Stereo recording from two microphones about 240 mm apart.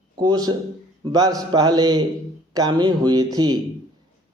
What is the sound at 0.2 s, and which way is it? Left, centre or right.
Speech, centre.